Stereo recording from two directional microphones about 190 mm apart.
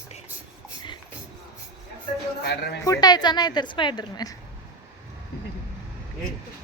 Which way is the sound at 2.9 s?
20° left (ahead or behind).